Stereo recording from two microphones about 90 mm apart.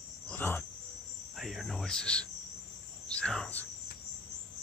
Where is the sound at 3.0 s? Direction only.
10° left (ahead or behind).